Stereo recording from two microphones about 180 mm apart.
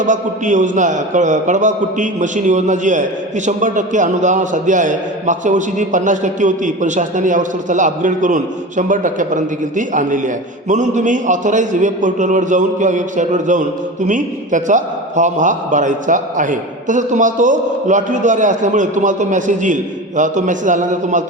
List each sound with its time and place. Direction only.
0.0 s a man's voice: 45° right (ahead or behind)